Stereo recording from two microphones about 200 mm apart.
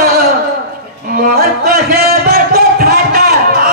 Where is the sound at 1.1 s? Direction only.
45° right (ahead or behind).